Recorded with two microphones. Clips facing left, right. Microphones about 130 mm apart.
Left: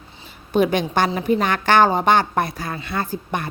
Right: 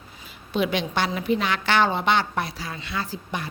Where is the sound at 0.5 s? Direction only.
45° left (ahead or behind).